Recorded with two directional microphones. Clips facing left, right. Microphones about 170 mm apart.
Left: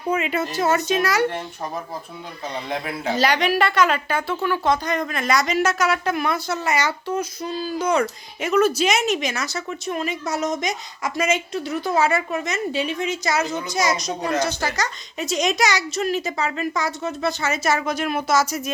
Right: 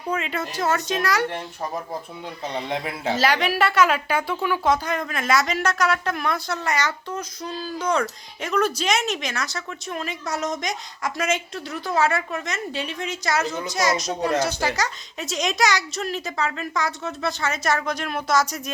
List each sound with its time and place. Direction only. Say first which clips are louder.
0.1 s a woman's voice: left 4 dB; 5° left (ahead or behind)
2.6 s a man's voice: even; 25° right (ahead or behind)
3.2 s a woman's voice: left 2 dB; 5° right (ahead or behind)